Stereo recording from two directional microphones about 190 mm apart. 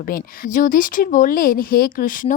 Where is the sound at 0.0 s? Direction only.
50° left (ahead or behind).